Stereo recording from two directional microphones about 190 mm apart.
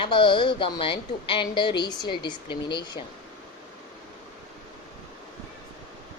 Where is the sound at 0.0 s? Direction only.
25° left (ahead or behind).